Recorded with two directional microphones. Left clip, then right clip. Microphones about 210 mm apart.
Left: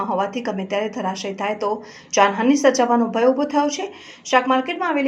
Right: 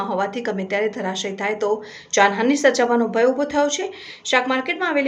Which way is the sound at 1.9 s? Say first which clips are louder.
Left 1 dB; centre (ahead or behind).